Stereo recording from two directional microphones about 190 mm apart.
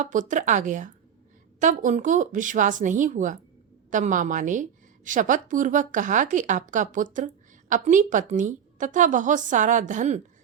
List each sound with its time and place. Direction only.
0.0 s a woman's voice: 40° right (ahead or behind)